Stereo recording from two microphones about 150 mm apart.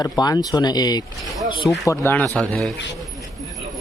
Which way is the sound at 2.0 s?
15° left (ahead or behind).